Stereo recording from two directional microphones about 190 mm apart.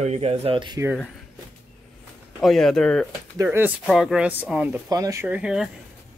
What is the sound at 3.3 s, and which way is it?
Speech, 10° right (ahead or behind).